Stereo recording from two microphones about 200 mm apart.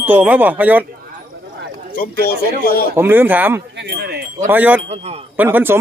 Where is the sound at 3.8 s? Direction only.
55° right (ahead or behind).